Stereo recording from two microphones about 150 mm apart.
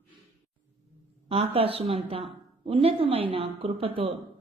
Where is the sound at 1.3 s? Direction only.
40° right (ahead or behind).